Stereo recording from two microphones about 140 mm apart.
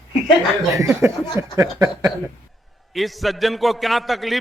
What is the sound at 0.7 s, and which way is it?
A man's voice, 20° right (ahead or behind).